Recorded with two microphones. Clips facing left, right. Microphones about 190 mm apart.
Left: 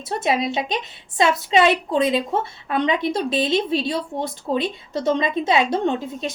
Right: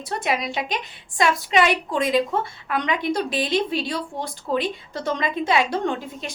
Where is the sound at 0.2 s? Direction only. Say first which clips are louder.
Left 4 dB; 25° left (ahead or behind).